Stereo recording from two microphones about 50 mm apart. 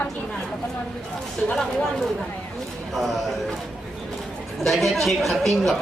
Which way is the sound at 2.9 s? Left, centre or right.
Centre.